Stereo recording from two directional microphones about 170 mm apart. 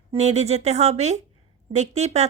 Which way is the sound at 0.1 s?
40° right (ahead or behind).